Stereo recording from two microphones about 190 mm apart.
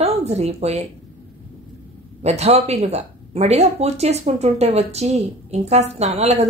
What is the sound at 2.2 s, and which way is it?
Speech, 35° right (ahead or behind).